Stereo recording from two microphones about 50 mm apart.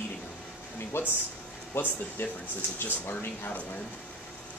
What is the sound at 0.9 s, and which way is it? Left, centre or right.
Speech, left.